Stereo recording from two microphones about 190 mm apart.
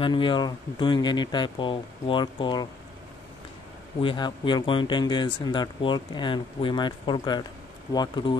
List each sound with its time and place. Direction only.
0.0 s speech: 25° left (ahead or behind)
4.0 s speech: 25° left (ahead or behind)